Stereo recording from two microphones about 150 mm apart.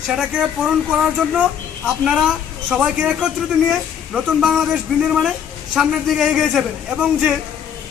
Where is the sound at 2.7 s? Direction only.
5° right (ahead or behind).